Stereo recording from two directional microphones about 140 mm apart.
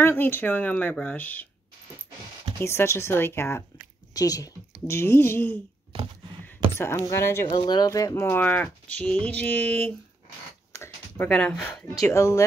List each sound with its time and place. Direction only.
0.0 s speech: 15° left (ahead or behind)
2.6 s speech: 20° left (ahead or behind)
10.7 s a sound: 20° left (ahead or behind)
11.2 s speech: 10° left (ahead or behind)